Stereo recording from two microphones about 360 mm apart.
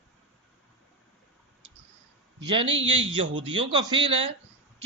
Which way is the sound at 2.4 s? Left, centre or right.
Centre.